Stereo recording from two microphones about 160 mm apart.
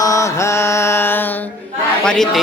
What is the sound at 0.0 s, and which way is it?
Mantra, 20° left (ahead or behind).